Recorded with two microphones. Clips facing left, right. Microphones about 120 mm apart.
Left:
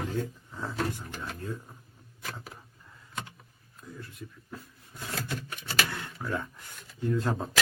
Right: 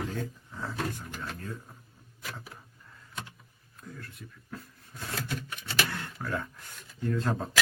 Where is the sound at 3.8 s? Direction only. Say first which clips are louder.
Even; centre (ahead or behind).